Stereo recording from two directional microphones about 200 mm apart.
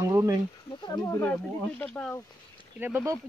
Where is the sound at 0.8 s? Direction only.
20° left (ahead or behind).